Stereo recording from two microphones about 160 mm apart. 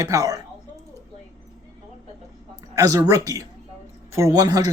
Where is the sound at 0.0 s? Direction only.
20° right (ahead or behind).